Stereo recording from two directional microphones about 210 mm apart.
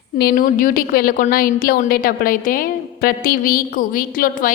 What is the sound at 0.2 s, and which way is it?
A woman's voice, 45° left (ahead or behind).